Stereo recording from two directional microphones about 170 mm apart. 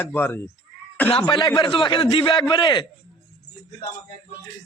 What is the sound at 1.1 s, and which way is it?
A man's voice, 30° left (ahead or behind).